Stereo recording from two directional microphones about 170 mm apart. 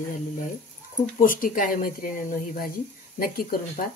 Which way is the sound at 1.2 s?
55° left (ahead or behind).